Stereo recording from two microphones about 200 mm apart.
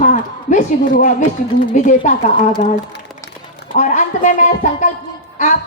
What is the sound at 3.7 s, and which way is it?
Speech, 40° left (ahead or behind).